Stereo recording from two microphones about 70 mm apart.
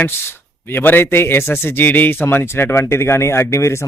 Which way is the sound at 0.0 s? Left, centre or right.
Left.